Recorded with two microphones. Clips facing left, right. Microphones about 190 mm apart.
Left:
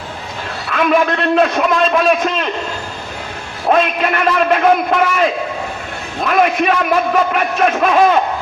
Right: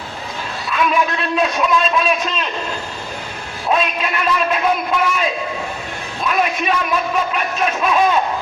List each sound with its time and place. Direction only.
0.7 s a man's voice: 55° left (ahead or behind)
3.7 s a man's voice: 55° left (ahead or behind)